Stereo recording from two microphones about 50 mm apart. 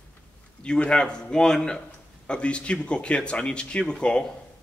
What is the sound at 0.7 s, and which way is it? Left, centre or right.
Speech, centre.